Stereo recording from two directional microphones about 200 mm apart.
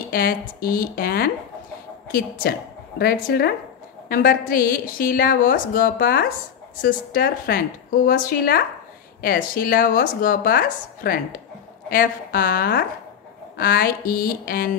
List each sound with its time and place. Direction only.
0.1 s a woman's voice: 45° left (ahead or behind)